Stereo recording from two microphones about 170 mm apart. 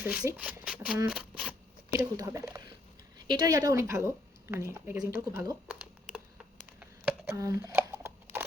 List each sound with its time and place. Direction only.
0.0 s a woman's voice: 5° right (ahead or behind)
1.0 s shuffling cards: 5° right (ahead or behind)
2.0 s a woman's voice: 20° right (ahead or behind)
5.6 s crumpling: 10° right (ahead or behind)
6.7 s a sound: 10° right (ahead or behind)
7.3 s a sound: 20° right (ahead or behind)